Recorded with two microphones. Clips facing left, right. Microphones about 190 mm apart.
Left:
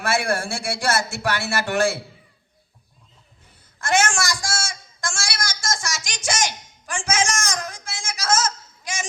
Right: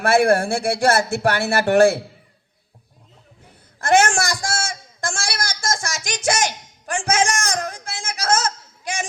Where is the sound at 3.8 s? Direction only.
55° right (ahead or behind).